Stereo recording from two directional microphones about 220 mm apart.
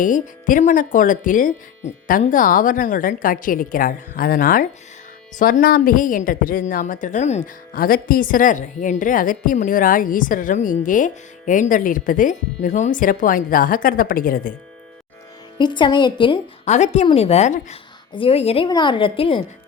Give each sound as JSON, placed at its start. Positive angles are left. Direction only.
{"t": 0.0, "sound": "a woman's voice", "side_deg": 35}
{"t": 15.5, "sound": "a woman's voice", "side_deg": 20}